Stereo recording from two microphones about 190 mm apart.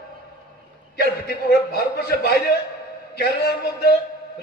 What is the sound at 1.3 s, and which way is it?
A man's voice, 55° left (ahead or behind).